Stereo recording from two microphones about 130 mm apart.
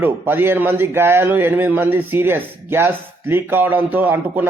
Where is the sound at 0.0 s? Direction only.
15° right (ahead or behind).